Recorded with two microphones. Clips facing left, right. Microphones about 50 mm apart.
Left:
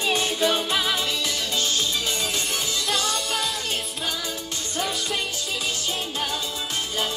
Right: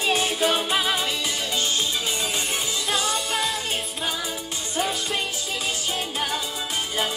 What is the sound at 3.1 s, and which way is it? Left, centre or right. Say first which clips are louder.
Music: right 1 dB; centre.